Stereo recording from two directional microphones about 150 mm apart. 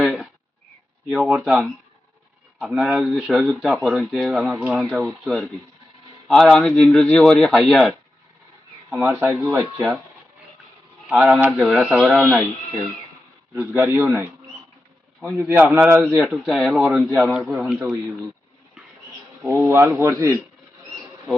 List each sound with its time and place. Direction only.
0.0 s a sound: centre (ahead or behind)
1.3 s speech: centre (ahead or behind)
4.5 s a man's voice: 15° right (ahead or behind)
4.8 s speech: centre (ahead or behind)
9.0 s a man's voice: 15° right (ahead or behind)
11.1 s a man's voice: centre (ahead or behind)
19.5 s speech: 20° right (ahead or behind)